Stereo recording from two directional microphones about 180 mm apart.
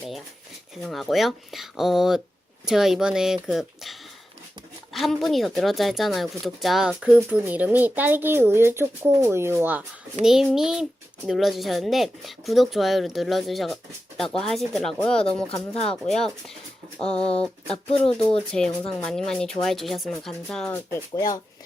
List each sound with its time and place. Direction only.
0.8 s speech: centre (ahead or behind)
4.9 s speech: centre (ahead or behind)
17.4 s speech: 5° left (ahead or behind)
20.7 s speech: 15° left (ahead or behind)